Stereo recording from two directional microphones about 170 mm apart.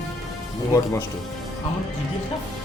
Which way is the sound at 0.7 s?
20° left (ahead or behind).